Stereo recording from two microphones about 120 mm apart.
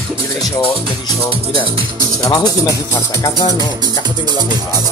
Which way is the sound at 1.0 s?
30° left (ahead or behind).